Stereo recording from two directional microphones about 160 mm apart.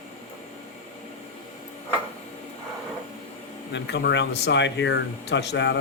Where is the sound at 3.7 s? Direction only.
90° left.